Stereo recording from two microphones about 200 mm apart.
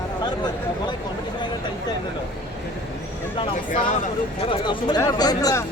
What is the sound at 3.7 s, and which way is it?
Speech, 35° left (ahead or behind).